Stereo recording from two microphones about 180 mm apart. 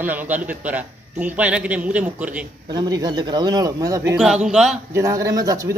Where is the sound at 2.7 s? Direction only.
20° right (ahead or behind).